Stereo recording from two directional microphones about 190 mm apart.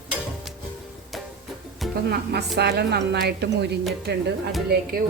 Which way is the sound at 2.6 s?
60° right (ahead or behind).